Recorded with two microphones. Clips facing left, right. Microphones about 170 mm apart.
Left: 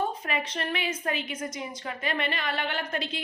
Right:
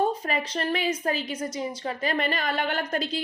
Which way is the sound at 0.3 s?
35° right (ahead or behind).